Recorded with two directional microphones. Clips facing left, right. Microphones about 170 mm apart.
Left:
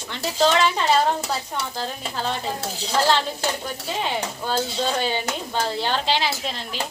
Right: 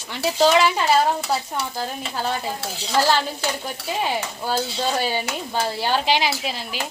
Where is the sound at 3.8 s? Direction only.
10° right (ahead or behind).